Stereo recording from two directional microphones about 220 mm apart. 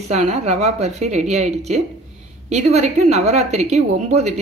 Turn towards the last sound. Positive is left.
turn(degrees=-30)  # may be behind; listen again after turning